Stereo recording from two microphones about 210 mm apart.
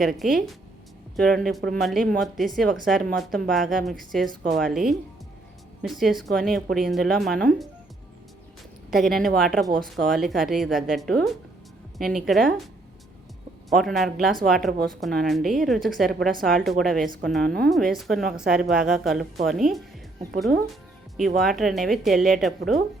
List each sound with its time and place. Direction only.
0.0 s speech: centre (ahead or behind)
8.9 s speech: centre (ahead or behind)
13.7 s speech: centre (ahead or behind)
17.4 s speech: 45° right (ahead or behind)
17.9 s speech: centre (ahead or behind)
21.2 s speech: centre (ahead or behind)